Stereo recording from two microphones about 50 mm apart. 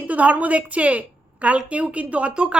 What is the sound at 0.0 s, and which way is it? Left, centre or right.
A woman's voice, right.